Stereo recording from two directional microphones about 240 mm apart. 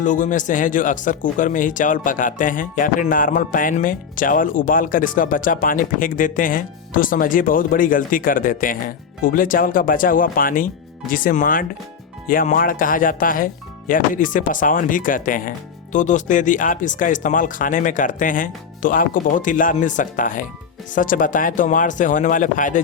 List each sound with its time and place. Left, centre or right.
0.0 s speech: left